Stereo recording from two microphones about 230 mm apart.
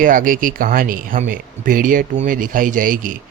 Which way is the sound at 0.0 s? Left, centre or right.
Right.